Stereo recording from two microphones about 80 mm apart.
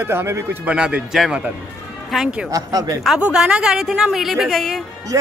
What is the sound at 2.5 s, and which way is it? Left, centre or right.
Speech, right.